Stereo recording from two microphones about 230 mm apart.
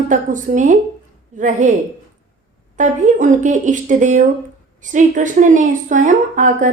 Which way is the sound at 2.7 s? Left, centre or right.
Right.